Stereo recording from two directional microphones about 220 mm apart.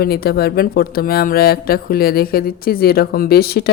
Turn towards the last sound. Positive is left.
turn(degrees=45)  # may be behind; listen again after turning